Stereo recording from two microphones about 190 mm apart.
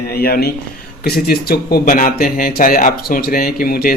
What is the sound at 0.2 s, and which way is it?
Speech, 55° left (ahead or behind).